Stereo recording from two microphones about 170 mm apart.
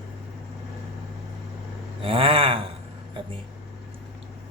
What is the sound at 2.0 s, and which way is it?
Speech, 35° right (ahead or behind).